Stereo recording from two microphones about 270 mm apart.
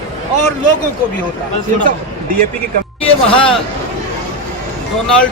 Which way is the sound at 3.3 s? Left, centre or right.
Centre.